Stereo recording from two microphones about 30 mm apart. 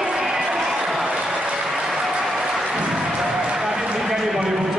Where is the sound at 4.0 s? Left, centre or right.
Centre.